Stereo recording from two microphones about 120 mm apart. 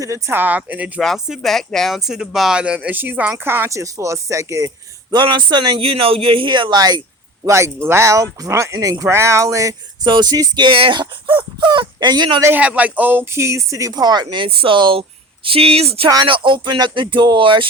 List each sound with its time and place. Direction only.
0.0 s speech: 25° right (ahead or behind)
1.0 s speech: centre (ahead or behind); by 4.7 s 25° right (ahead or behind)
5.1 s speech: 40° right (ahead or behind)
5.8 s speech: 50° right (ahead or behind); by 7.0 s 35° right (ahead or behind)
7.4 s speech: 25° right (ahead or behind)
12.5 s speech: 10° right (ahead or behind); by 16.0 s 55° right (ahead or behind)
16.0 s speech: 40° right (ahead or behind)